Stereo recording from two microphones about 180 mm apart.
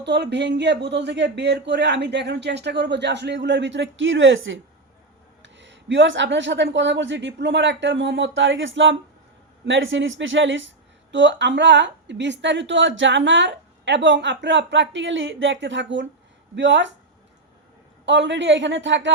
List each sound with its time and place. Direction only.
0.0 s a man's voice: 70° right (ahead or behind)
18.0 s a woman's voice: 80° right